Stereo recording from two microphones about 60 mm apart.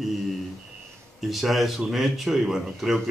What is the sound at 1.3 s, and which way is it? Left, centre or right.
Speech, centre.